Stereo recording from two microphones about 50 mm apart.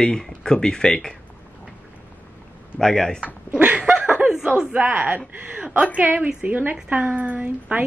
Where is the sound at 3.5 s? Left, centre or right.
Right.